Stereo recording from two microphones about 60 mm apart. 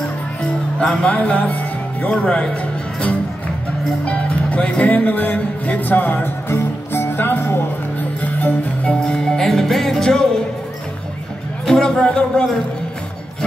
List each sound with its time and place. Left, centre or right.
0.7 s speech: centre
6.5 s music: left
8.9 s music: centre
11.6 s a sound: centre
12.0 s speech: centre